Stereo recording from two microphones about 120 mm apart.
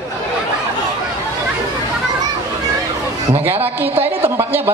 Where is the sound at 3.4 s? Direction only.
15° right (ahead or behind).